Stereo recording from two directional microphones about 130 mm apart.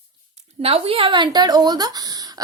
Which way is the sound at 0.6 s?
45° right (ahead or behind).